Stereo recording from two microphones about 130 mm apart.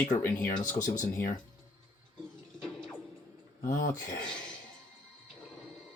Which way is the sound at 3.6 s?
85° left.